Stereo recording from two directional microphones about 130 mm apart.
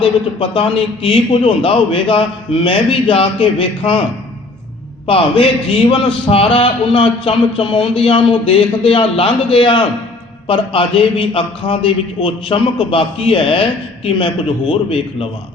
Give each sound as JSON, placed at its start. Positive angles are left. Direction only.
{"t": 0.0, "sound": "a man's voice", "side_deg": 45}
{"t": 5.0, "sound": "a man's voice", "side_deg": 45}